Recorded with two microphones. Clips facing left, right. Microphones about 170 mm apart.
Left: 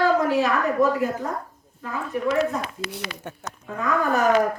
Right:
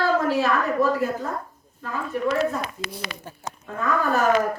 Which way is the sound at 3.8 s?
15° left (ahead or behind).